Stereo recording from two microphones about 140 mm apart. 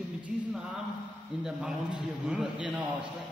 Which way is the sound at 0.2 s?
5° right (ahead or behind).